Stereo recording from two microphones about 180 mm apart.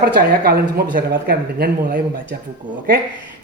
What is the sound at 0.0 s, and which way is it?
A man's voice, 60° right (ahead or behind).